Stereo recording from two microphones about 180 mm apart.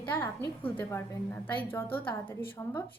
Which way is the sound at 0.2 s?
10° left (ahead or behind).